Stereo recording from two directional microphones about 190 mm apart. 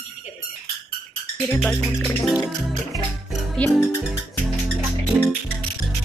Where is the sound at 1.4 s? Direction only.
5° left (ahead or behind).